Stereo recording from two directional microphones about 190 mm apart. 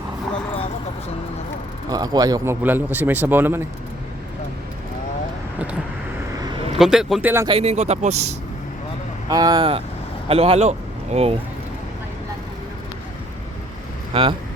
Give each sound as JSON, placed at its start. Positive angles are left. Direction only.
{"t": 1.9, "sound": "speech", "side_deg": -20}
{"t": 6.7, "sound": "speech", "side_deg": 0}
{"t": 7.4, "sound": "speech", "side_deg": -30}
{"t": 9.3, "sound": "a man's voice", "side_deg": -20}
{"t": 14.1, "sound": "speech", "side_deg": -30}